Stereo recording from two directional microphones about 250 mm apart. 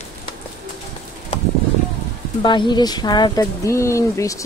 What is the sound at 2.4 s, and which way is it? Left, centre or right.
Speech, centre.